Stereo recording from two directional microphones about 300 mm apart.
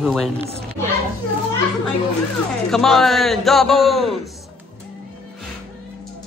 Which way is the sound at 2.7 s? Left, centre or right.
Centre.